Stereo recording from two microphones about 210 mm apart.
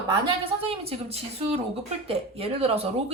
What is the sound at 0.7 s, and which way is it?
A woman's voice, 30° right (ahead or behind).